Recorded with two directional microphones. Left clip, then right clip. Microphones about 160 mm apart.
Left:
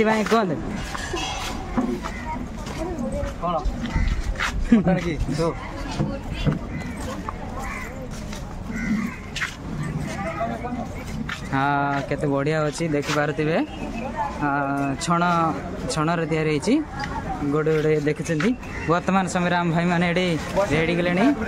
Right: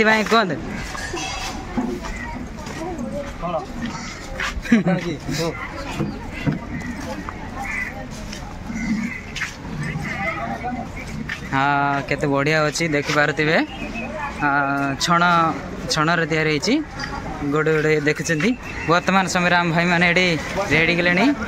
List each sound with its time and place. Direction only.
0.0 s speech: 5° left (ahead or behind)
4.6 s speech: 5° left (ahead or behind)
6.5 s horse: 65° left (ahead or behind)
11.2 s speech: 5° left (ahead or behind)